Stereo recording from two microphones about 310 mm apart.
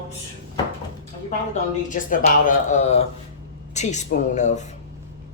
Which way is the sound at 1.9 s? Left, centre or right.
Left.